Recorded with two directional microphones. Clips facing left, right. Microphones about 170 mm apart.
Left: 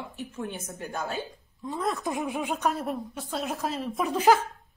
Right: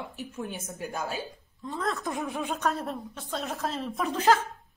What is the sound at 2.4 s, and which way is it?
A woman's voice, 5° left (ahead or behind).